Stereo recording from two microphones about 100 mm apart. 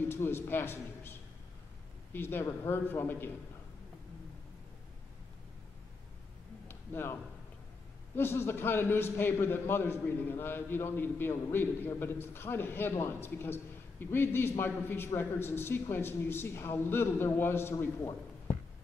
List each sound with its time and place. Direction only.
0.1 s a man's voice: 25° left (ahead or behind)
2.1 s a man's voice: 20° left (ahead or behind)
6.7 s a sound: 25° left (ahead or behind)
8.2 s a man's voice: 25° left (ahead or behind)